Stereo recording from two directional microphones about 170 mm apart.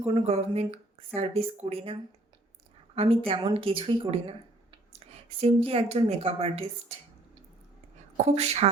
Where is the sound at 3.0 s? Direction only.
35° right (ahead or behind).